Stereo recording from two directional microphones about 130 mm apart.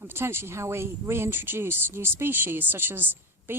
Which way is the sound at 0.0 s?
15° right (ahead or behind).